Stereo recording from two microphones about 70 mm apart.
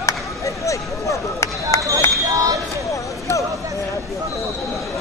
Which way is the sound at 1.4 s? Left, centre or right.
Left.